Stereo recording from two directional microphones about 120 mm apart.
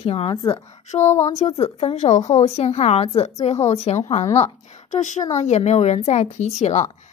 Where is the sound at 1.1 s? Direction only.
25° left (ahead or behind).